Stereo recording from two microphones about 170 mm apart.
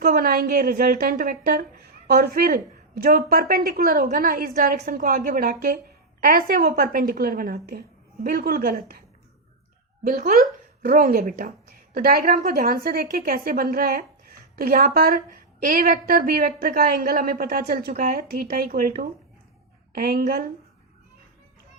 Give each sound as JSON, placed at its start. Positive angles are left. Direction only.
{"t": 0.0, "sound": "a woman's voice", "side_deg": -55}
{"t": 10.0, "sound": "a woman's voice", "side_deg": -55}